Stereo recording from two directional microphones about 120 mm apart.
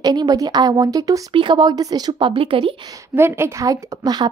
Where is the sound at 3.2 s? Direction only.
20° right (ahead or behind).